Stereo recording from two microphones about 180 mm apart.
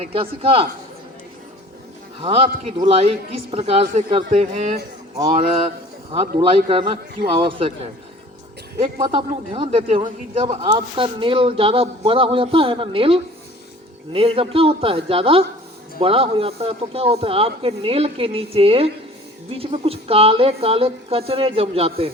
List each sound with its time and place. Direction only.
0.0 s a man's voice: 30° right (ahead or behind)
2.2 s a man's voice: 30° right (ahead or behind)